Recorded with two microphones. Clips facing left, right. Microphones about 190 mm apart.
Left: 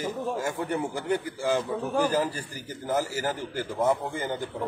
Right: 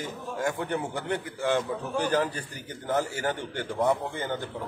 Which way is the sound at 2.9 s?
5° left (ahead or behind).